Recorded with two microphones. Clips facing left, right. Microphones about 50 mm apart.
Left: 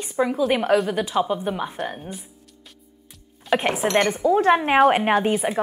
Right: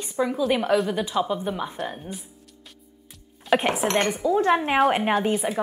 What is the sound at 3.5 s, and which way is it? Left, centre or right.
Speech, centre.